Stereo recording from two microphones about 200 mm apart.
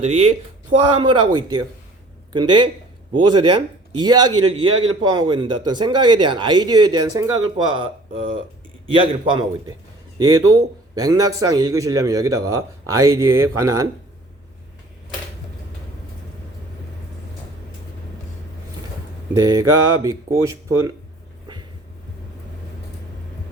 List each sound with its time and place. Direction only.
0.0 s speech: 35° right (ahead or behind)
0.9 s a man's voice: 25° right (ahead or behind)
19.3 s a man's voice: 15° right (ahead or behind)